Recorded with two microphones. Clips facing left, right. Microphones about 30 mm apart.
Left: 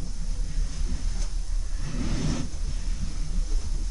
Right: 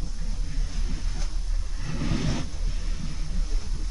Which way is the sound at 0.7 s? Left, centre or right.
Centre.